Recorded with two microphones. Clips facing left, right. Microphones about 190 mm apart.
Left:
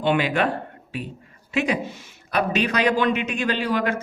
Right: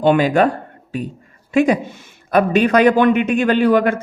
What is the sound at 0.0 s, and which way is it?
A man's voice, 45° right (ahead or behind).